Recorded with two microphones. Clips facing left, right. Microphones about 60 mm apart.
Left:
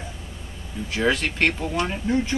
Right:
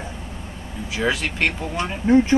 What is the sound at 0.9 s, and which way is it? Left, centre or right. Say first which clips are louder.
Speech: even; centre.